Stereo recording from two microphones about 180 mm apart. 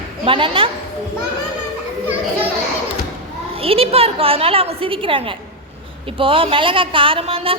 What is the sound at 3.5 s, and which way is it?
A woman's voice, 30° right (ahead or behind).